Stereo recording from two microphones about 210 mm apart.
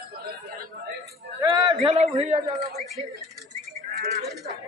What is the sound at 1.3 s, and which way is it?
A man's voice, 20° right (ahead or behind).